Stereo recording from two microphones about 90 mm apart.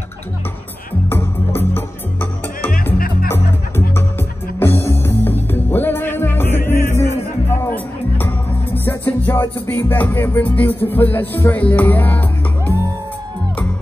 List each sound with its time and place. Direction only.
1.1 s music: 25° left (ahead or behind)